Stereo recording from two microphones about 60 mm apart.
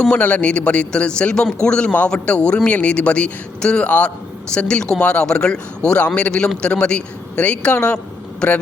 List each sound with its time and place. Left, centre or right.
0.1 s a man's voice: left